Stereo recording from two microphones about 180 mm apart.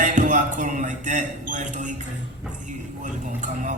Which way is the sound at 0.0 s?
45° right (ahead or behind).